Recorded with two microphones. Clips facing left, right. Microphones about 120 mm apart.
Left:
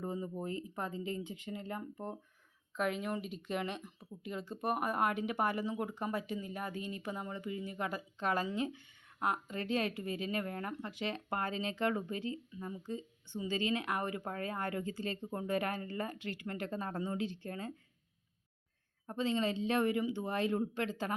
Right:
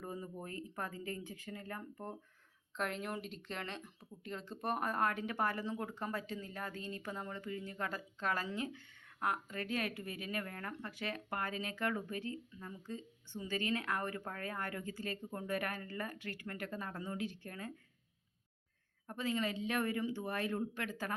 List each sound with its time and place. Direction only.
0.0 s speech: 20° left (ahead or behind)
2.7 s speech: 5° left (ahead or behind); by 17.7 s 25° left (ahead or behind)
19.0 s speech: 25° left (ahead or behind)